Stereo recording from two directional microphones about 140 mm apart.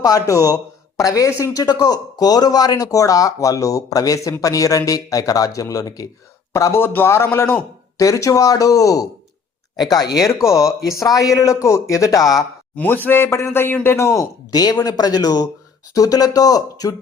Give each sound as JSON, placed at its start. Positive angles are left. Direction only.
{"t": 0.0, "sound": "speech", "side_deg": 25}
{"t": 12.7, "sound": "speech", "side_deg": 10}